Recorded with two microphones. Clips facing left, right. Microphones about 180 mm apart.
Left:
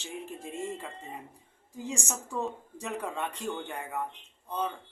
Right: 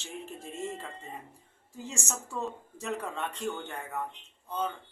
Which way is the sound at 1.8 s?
15° left (ahead or behind).